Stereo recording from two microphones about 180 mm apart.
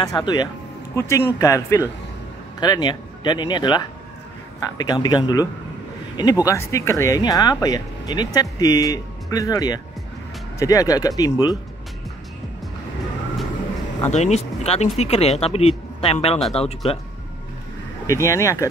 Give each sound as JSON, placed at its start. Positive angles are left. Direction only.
{"t": 0.0, "sound": "speech", "side_deg": 20}
{"t": 14.1, "sound": "speech", "side_deg": 40}
{"t": 18.0, "sound": "speech", "side_deg": 15}